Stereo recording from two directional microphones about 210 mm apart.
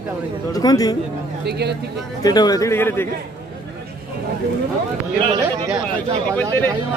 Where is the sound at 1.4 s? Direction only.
50° right (ahead or behind).